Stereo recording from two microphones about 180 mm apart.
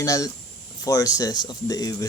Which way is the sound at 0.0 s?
20° left (ahead or behind).